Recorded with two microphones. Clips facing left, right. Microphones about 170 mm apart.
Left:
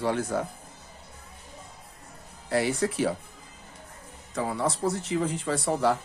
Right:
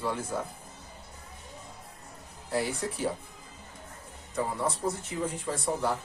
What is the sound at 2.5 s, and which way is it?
Speech, 80° left.